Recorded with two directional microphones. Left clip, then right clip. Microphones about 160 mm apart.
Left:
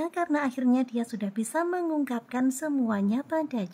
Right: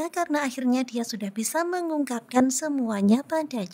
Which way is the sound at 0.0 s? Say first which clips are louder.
Right 2 dB; 45° right (ahead or behind).